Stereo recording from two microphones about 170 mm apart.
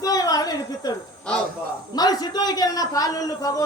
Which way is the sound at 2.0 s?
25° left (ahead or behind).